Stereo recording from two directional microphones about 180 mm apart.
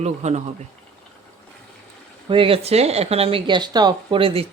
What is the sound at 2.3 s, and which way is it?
Speech, 30° right (ahead or behind).